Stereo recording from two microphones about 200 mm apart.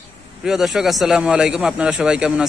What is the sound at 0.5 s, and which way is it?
A man's voice, centre (ahead or behind).